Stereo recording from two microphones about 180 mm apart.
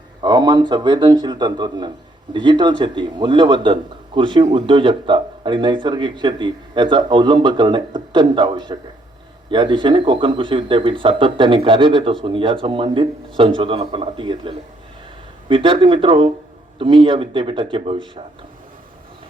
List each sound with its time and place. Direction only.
0.2 s speech: 25° right (ahead or behind)